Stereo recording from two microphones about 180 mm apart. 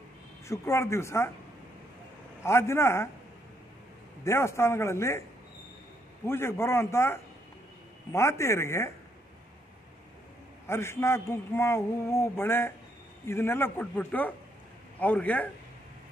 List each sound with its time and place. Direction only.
0.5 s a man's voice: 15° left (ahead or behind)
2.4 s a man's voice: 15° left (ahead or behind)
4.2 s a man's voice: 15° left (ahead or behind)
6.2 s a man's voice: 15° left (ahead or behind)
10.7 s a man's voice: 15° left (ahead or behind)